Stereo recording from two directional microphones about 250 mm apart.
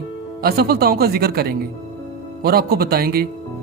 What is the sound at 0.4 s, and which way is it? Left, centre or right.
A man's voice, right.